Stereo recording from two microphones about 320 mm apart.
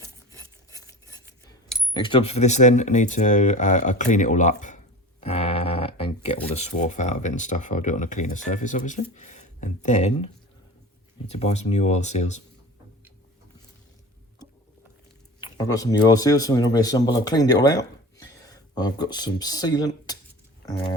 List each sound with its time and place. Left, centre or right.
1.9 s speech: centre
5.2 s a sound: centre
6.5 s speech: left
11.3 s speech: centre
15.4 s speech: centre